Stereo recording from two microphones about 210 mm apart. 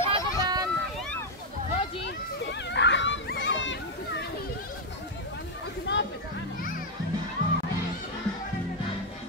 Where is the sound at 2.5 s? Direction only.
55° left (ahead or behind).